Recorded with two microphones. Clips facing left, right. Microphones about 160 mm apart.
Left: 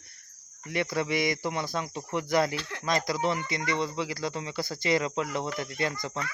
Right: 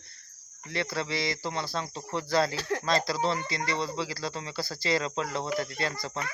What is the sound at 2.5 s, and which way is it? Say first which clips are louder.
Speech: right 5 dB; 40° right (ahead or behind).